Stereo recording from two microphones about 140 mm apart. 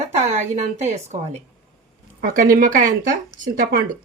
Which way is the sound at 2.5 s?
75° right (ahead or behind).